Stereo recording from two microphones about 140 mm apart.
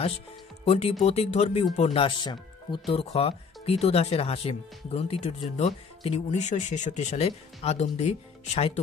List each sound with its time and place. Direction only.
0.7 s speech: 50° left (ahead or behind)